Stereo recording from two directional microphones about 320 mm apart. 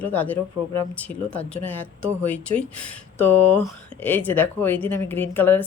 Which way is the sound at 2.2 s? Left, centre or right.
Left.